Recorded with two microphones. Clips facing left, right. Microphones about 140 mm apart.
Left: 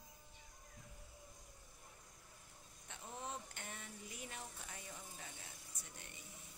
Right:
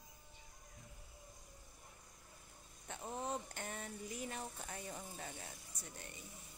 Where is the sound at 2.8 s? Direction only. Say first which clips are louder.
Right 6 dB; 45° right (ahead or behind).